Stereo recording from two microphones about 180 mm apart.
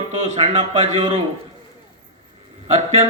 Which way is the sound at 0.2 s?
35° right (ahead or behind).